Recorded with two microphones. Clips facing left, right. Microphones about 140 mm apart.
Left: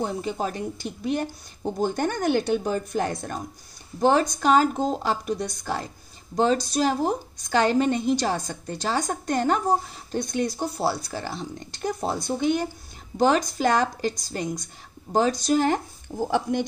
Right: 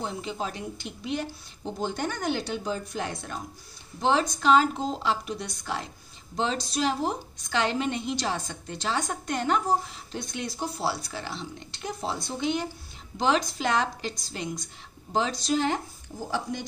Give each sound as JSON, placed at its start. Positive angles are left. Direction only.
{"t": 0.0, "sound": "a woman's voice", "side_deg": 45}